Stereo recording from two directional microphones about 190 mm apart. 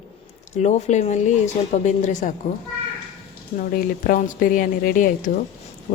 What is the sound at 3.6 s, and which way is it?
A woman's voice, 45° left (ahead or behind).